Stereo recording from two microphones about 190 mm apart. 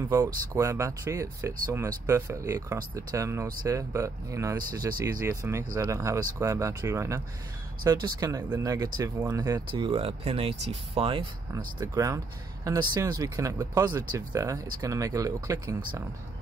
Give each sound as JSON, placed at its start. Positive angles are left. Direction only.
{"t": 0.6, "sound": "speech", "side_deg": -15}
{"t": 11.5, "sound": "speech", "side_deg": -20}